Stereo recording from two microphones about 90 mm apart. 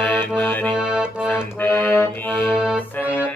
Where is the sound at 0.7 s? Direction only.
10° right (ahead or behind).